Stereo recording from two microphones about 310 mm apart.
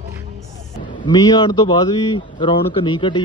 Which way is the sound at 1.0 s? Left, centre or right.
Centre.